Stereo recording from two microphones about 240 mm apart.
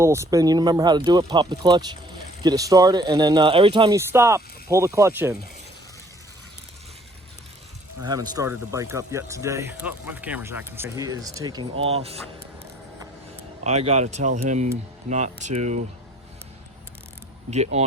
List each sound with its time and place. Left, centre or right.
0.0 s speech: centre
8.0 s speech: centre
13.7 s speech: right
17.5 s speech: right